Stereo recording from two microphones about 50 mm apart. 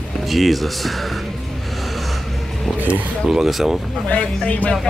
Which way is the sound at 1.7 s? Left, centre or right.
Centre.